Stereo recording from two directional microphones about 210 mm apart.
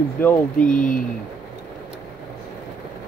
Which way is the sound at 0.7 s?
40° left (ahead or behind).